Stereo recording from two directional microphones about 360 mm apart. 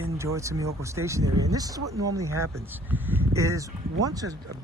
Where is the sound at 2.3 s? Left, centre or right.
Right.